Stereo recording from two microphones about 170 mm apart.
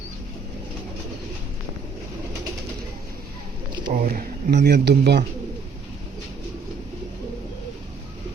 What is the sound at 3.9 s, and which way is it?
Speech, 55° right (ahead or behind).